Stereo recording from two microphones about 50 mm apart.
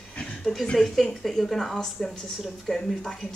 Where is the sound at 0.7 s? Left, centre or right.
Centre.